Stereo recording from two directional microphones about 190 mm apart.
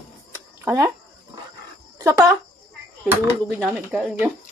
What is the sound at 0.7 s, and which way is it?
Speech, 15° right (ahead or behind).